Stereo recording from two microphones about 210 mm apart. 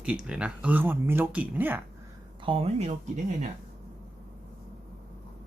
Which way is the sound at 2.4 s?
25° right (ahead or behind).